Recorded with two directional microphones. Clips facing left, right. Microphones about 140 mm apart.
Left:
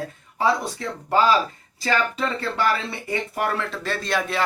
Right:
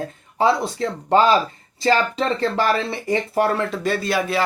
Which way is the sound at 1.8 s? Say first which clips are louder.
Right 5 dB; 30° right (ahead or behind).